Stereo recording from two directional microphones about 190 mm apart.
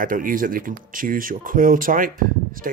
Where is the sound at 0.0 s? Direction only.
45° right (ahead or behind).